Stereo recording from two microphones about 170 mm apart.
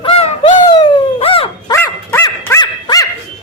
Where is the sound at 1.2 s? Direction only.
35° left (ahead or behind).